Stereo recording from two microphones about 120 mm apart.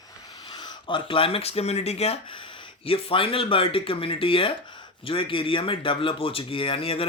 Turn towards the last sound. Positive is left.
turn(degrees=50)  # may be behind; listen again after turning